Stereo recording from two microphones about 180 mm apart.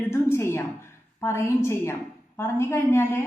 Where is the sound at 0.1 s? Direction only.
15° left (ahead or behind).